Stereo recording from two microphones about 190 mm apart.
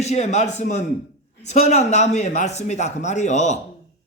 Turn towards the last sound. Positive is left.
turn(degrees=40)  # may be behind; listen again after turning